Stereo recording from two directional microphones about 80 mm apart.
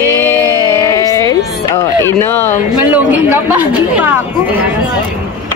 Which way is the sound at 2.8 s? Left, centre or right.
Right.